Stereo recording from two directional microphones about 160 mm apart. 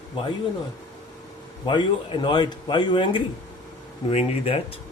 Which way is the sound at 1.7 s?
30° left (ahead or behind).